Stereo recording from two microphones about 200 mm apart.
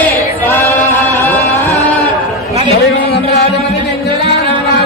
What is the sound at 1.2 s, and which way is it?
Music, 15° left (ahead or behind).